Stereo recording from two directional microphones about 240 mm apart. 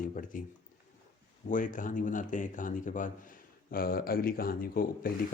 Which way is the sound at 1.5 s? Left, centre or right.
Left.